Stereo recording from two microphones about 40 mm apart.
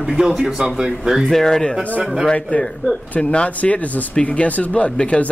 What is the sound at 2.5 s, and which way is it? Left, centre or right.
Speech, left.